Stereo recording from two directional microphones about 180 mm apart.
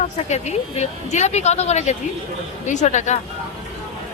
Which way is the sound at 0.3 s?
40° left (ahead or behind).